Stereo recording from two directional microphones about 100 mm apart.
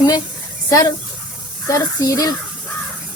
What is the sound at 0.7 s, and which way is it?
Speech, 35° left (ahead or behind).